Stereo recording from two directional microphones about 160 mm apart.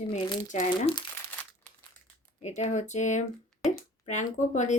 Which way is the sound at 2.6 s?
45° left (ahead or behind).